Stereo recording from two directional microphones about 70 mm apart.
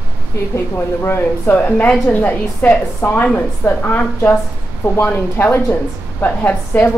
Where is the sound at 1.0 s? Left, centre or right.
Left.